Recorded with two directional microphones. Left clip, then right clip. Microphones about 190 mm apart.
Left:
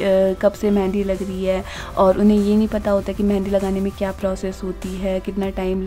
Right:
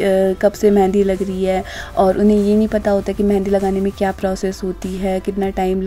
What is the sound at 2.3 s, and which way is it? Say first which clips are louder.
A woman's voice: right 4 dB; 15° right (ahead or behind).